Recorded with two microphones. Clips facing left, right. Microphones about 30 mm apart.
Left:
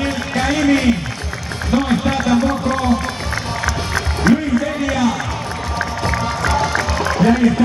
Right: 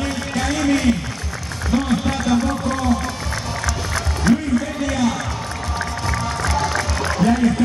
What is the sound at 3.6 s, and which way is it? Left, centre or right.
Music, centre.